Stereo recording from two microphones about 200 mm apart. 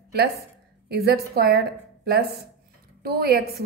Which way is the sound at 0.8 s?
50° right (ahead or behind).